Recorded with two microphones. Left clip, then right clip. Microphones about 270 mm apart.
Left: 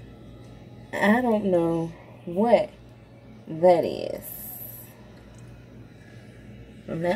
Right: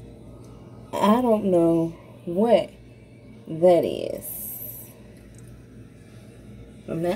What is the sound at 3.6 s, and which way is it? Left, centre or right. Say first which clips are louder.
Speech: right 1 dB; centre.